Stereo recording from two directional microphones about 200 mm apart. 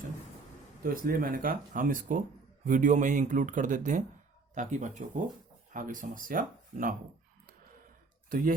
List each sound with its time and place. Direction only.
0.8 s speech: 45° right (ahead or behind)
8.3 s speech: 45° right (ahead or behind)